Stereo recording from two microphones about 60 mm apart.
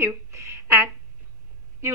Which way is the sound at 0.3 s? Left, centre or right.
Right.